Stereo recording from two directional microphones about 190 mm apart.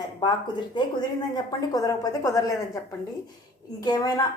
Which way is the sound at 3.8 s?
20° left (ahead or behind).